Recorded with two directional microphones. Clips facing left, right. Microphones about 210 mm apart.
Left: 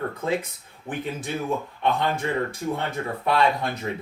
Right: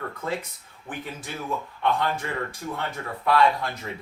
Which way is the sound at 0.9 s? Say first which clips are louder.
Left 6 dB; 20° left (ahead or behind).